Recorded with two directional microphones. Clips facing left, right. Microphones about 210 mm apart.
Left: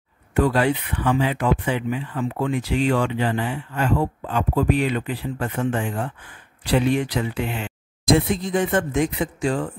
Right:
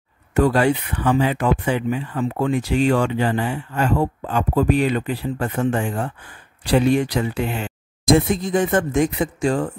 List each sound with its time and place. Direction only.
0.3 s speech: 45° right (ahead or behind)